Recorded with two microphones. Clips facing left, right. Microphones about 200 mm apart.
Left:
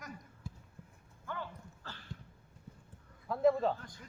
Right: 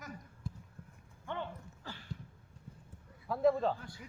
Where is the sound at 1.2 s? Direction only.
25° right (ahead or behind).